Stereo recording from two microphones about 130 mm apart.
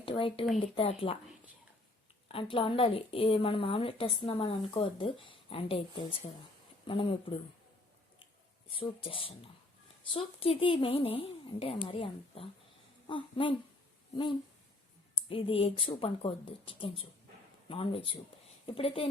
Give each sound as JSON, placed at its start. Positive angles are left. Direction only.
{"t": 0.0, "sound": "a woman's voice", "side_deg": 45}
{"t": 2.3, "sound": "a woman's voice", "side_deg": 40}
{"t": 8.7, "sound": "a woman's voice", "side_deg": 45}
{"t": 15.3, "sound": "a woman's voice", "side_deg": 45}